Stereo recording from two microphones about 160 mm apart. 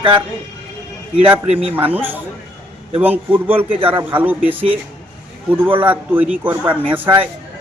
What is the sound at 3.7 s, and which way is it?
Speech, 35° right (ahead or behind).